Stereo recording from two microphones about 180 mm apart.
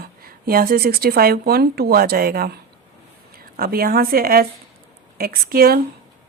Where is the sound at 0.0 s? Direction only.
55° right (ahead or behind).